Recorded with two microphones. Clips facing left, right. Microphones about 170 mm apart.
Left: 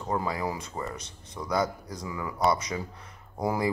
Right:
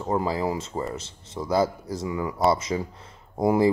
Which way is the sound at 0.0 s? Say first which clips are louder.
Right 5 dB; 25° right (ahead or behind).